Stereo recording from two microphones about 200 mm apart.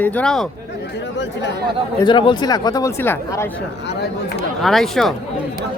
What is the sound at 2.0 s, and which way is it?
Speech, 25° left (ahead or behind).